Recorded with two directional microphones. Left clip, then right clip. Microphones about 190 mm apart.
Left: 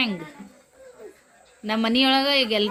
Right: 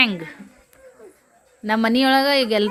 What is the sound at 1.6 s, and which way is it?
Speech, 25° right (ahead or behind).